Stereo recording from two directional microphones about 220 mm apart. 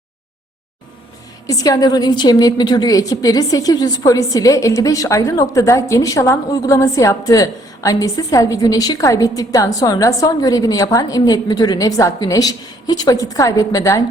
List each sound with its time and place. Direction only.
1.5 s a woman's voice: 15° left (ahead or behind)